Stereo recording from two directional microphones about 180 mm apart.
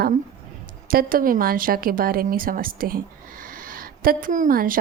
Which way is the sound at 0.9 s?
50° right (ahead or behind).